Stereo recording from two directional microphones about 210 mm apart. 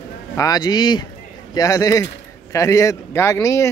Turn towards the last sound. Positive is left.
turn(degrees=15)  # may be behind; listen again after turning